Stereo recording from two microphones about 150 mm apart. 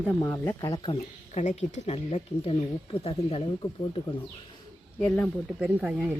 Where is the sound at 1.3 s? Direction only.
50° left (ahead or behind).